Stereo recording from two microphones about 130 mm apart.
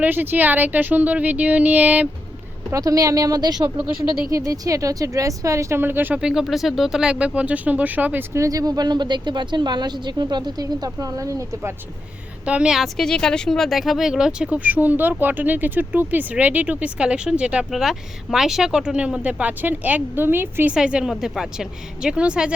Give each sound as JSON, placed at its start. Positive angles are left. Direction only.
{"t": 0.0, "sound": "speech", "side_deg": -15}
{"t": 2.7, "sound": "speech", "side_deg": -25}
{"t": 12.5, "sound": "a woman's voice", "side_deg": -5}